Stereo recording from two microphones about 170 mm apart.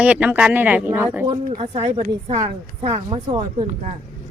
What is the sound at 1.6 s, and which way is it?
Speech, 35° right (ahead or behind).